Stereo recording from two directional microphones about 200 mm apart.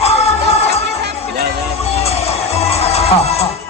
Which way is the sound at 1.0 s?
55° right (ahead or behind).